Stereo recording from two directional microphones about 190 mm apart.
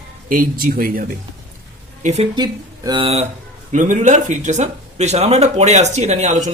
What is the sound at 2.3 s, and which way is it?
Speech, 25° right (ahead or behind).